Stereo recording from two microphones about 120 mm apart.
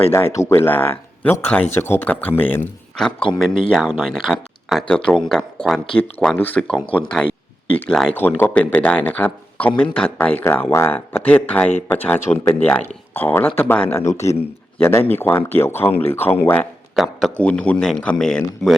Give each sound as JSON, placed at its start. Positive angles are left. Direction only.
{"t": 0.3, "sound": "speech", "side_deg": 20}
{"t": 16.9, "sound": "speech", "side_deg": 0}